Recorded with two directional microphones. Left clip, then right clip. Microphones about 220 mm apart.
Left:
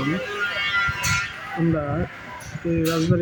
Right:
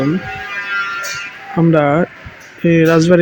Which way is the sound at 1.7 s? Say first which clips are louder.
Right 13 dB; 30° right (ahead or behind).